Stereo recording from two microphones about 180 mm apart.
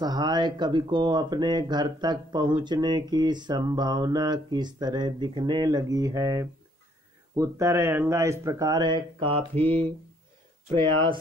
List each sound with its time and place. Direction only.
0.0 s speech: 25° right (ahead or behind)
9.6 s a sound: 10° left (ahead or behind)
10.7 s speech: 25° right (ahead or behind)